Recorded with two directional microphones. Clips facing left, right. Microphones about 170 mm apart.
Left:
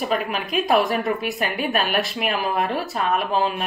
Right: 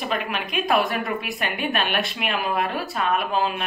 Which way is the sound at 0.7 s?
Centre (ahead or behind).